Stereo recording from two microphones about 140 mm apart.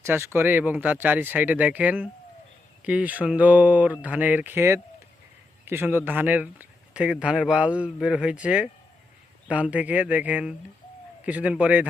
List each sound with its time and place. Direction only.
0.0 s speech: 20° right (ahead or behind)